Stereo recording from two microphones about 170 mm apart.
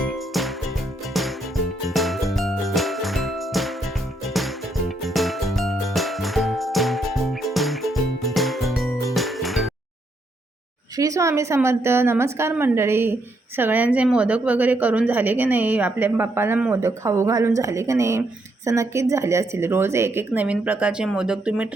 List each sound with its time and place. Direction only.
0.0 s music: centre (ahead or behind)
10.9 s a woman's voice: 20° right (ahead or behind)